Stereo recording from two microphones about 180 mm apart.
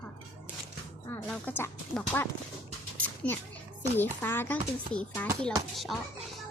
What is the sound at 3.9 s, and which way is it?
A child's voice, 10° left (ahead or behind).